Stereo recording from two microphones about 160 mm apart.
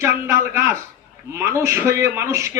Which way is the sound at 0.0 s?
15° right (ahead or behind).